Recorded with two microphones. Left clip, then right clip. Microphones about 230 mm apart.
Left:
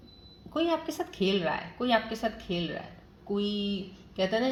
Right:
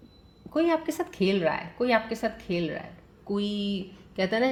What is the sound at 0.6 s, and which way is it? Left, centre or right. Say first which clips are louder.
Speech: right 4 dB; right.